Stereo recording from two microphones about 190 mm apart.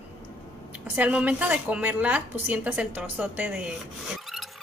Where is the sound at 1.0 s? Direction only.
5° right (ahead or behind).